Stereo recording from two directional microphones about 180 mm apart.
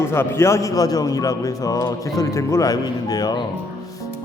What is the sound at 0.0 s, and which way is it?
A man's voice, 15° left (ahead or behind).